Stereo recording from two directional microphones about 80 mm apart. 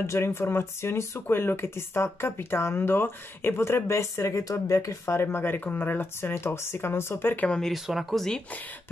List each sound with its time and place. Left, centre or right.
0.0 s speech: left
7.4 s speech: centre
7.7 s speech: centre